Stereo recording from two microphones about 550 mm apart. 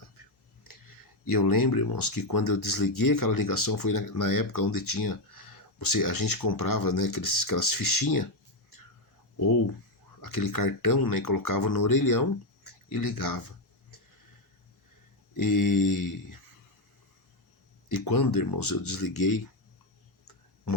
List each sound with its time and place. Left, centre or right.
1.3 s speech: left
10.2 s speech: left
15.4 s speech: left
17.8 s speech: left